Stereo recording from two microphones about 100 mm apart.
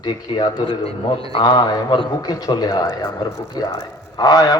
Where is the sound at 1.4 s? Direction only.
45° left (ahead or behind).